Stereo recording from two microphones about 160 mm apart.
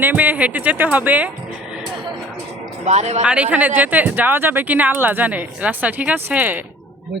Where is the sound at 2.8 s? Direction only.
45° right (ahead or behind).